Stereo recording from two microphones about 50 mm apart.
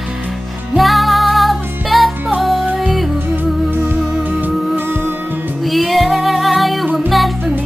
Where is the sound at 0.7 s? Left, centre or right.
Centre.